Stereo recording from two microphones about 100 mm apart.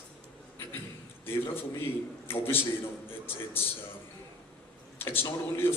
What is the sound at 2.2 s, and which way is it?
Speech, 20° left (ahead or behind).